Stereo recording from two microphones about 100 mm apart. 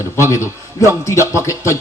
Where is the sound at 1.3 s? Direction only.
30° left (ahead or behind).